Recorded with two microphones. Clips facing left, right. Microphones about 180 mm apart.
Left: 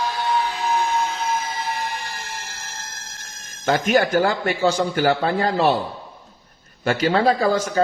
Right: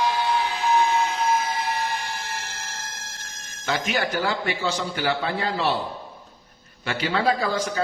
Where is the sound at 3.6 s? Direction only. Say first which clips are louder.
Left 7 dB; 45° left (ahead or behind).